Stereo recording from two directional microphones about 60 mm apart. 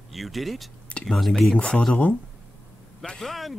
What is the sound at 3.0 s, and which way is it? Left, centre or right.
Speech, centre.